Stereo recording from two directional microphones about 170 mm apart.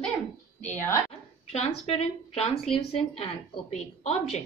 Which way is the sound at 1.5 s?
40° left (ahead or behind).